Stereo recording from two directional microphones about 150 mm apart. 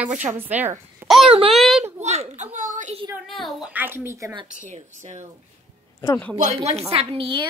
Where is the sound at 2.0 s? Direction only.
50° right (ahead or behind).